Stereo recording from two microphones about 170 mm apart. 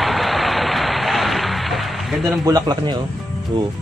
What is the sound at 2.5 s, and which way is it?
Speech, 20° right (ahead or behind).